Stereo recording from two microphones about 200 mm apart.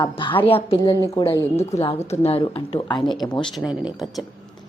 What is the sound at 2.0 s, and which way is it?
A woman's voice, 30° left (ahead or behind).